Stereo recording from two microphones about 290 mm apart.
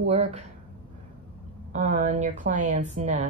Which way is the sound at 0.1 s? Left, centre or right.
Right.